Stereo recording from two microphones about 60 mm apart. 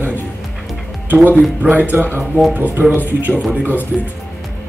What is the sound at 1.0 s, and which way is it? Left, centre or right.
A man's voice, right.